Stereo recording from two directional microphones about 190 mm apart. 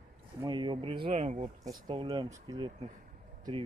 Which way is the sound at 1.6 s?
20° right (ahead or behind).